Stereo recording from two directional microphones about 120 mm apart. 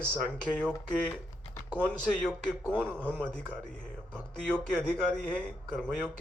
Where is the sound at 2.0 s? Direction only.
5° left (ahead or behind).